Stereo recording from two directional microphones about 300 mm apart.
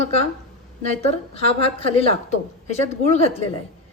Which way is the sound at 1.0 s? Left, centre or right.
Centre.